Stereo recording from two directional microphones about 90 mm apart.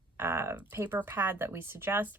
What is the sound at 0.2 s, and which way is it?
A woman's voice, 25° right (ahead or behind).